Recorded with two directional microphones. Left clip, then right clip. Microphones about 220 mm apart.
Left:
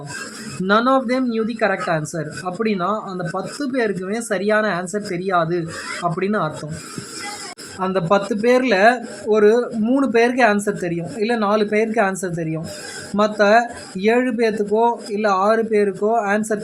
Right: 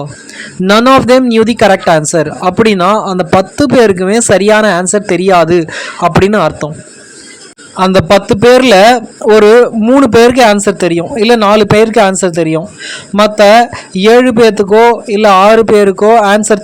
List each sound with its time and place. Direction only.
0.7 s a man's voice: 40° right (ahead or behind)
7.8 s a man's voice: 40° right (ahead or behind)